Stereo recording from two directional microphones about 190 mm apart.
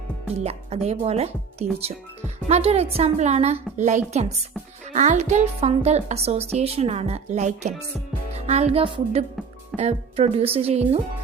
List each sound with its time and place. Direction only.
0.3 s speech: 35° right (ahead or behind)